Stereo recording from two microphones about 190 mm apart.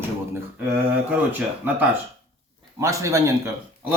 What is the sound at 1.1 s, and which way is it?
Speech, 10° right (ahead or behind).